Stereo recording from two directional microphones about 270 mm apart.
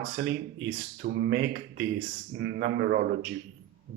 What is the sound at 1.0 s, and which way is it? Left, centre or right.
Speech, right.